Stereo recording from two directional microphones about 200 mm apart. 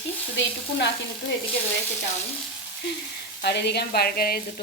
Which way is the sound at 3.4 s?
55° left (ahead or behind).